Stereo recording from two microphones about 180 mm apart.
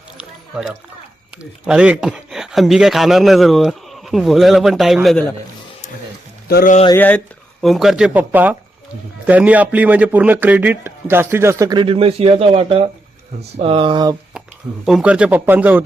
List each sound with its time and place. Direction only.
0.2 s music: 5° right (ahead or behind)
1.4 s speech: 5° right (ahead or behind)
6.5 s speech: 55° left (ahead or behind)
6.9 s a man's voice: 10° left (ahead or behind); by 14.2 s 25° right (ahead or behind)
14.8 s a man's voice: 5° right (ahead or behind)